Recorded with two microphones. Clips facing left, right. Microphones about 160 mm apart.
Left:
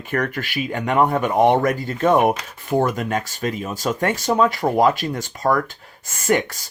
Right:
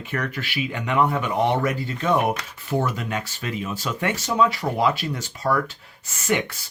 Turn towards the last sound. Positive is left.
turn(degrees=50)  # may be behind; listen again after turning